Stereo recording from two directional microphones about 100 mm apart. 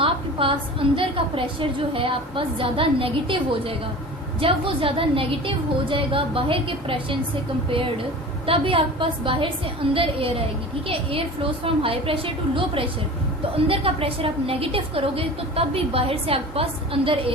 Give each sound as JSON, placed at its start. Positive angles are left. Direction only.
{"t": 0.0, "sound": "a woman's voice", "side_deg": -65}
{"t": 8.4, "sound": "a woman's voice", "side_deg": -65}
{"t": 11.6, "sound": "a woman's voice", "side_deg": -70}